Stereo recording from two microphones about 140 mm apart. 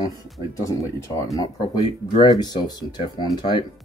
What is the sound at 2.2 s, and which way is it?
Speech, 30° left (ahead or behind).